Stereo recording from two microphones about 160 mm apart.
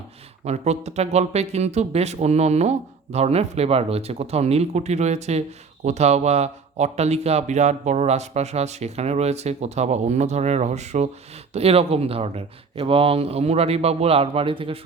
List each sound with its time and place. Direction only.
0.4 s speech: 45° right (ahead or behind)